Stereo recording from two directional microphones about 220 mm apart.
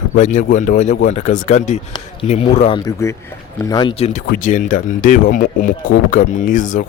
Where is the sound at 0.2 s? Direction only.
35° left (ahead or behind).